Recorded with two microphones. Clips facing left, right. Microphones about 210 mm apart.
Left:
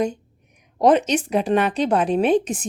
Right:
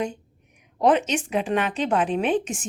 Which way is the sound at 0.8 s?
40° left (ahead or behind).